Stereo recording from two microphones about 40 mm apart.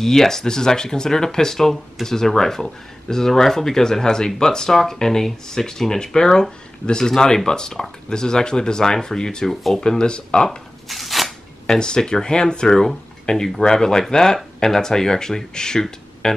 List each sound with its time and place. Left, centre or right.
0.0 s speech: centre
9.5 s speech: centre
9.8 s speech: left
10.9 s a sound: centre
11.6 s speech: centre